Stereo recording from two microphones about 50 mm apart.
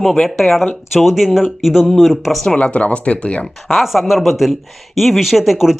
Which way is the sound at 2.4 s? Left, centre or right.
Left.